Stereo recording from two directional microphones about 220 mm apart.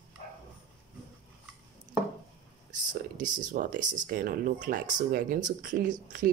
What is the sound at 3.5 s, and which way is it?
Speech, 40° right (ahead or behind).